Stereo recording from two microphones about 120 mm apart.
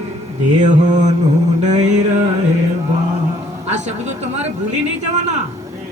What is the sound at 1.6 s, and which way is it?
Speech, 75° right (ahead or behind).